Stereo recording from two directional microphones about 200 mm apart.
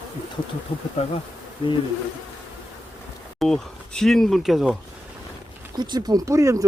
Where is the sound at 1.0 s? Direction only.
30° left (ahead or behind).